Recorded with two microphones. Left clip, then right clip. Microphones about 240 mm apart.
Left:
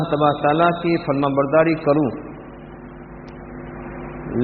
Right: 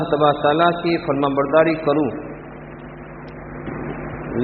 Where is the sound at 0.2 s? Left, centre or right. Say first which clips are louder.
Right 1 dB; left.